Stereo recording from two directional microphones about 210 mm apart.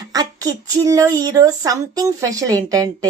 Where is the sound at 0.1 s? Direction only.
15° right (ahead or behind).